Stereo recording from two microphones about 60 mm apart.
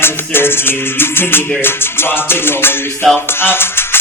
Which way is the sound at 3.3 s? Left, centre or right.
Left.